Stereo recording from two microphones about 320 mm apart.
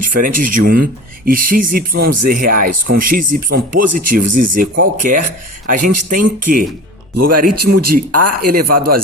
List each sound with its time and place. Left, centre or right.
0.0 s speech: right
7.2 s speech: right